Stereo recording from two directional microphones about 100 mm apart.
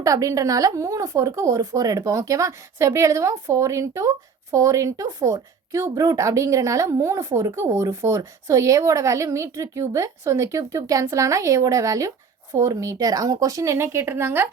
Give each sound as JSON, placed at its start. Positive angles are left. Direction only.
{"t": 0.0, "sound": "a woman's voice", "side_deg": -35}